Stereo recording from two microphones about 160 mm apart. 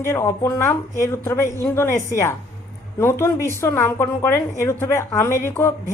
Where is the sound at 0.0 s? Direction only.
15° left (ahead or behind).